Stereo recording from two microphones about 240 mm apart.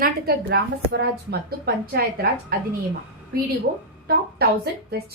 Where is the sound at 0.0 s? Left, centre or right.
Right.